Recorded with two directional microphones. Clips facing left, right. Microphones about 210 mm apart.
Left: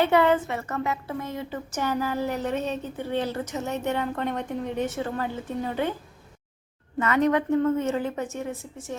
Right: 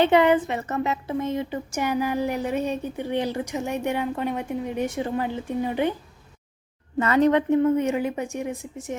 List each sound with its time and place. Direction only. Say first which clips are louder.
0.0 s a woman's voice: right 3 dB; 20° right (ahead or behind)
7.0 s a woman's voice: right 3 dB; 30° right (ahead or behind)
7.6 s a woman's voice: right 3 dB; 15° right (ahead or behind)